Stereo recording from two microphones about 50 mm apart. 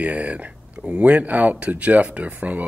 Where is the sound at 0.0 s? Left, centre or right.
Right.